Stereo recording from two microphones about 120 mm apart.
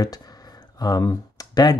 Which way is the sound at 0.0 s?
30° left (ahead or behind).